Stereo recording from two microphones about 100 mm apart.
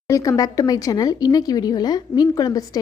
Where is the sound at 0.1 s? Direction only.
35° left (ahead or behind).